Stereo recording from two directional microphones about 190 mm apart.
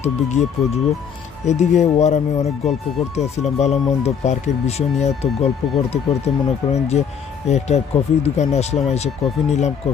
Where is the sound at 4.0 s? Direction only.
35° left (ahead or behind).